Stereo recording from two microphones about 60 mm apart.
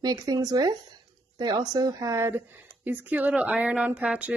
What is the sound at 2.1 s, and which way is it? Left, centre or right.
Speech, right.